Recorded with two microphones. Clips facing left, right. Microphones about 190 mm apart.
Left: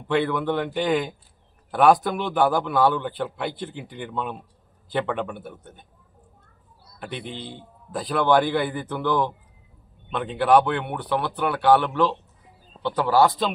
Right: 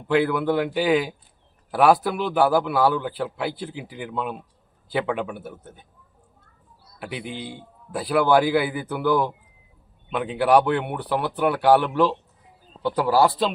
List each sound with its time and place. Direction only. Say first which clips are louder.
0.1 s a man's voice: right 2 dB; 5° right (ahead or behind)
7.0 s a man's voice: right 2 dB; 5° right (ahead or behind)